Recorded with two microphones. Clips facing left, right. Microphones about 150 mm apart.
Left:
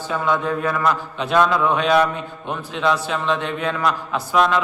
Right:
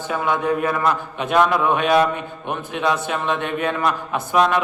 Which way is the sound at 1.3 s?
15° right (ahead or behind).